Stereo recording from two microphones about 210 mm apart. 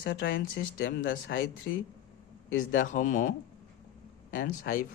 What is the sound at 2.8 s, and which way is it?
Speech, 40° left (ahead or behind).